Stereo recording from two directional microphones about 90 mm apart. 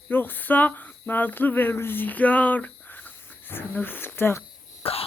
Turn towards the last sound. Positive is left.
turn(degrees=90)